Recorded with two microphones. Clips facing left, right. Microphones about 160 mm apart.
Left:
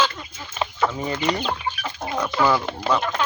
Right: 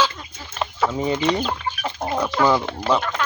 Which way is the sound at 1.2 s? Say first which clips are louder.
Left 1 dB; centre (ahead or behind).